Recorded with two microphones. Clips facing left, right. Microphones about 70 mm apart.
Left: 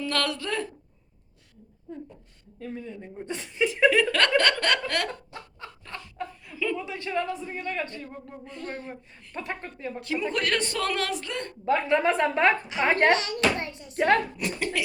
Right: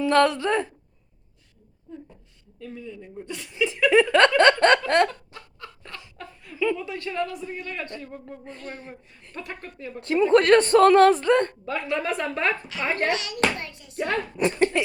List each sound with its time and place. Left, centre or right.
0.0 s a sound: right
2.6 s speech: left
3.8 s a sound: right
6.2 s laughter: centre
6.8 s a man's voice: centre
9.3 s a man's voice: left
10.0 s a woman's voice: right
11.6 s a man's voice: left
12.9 s speech: left
14.3 s a woman's voice: right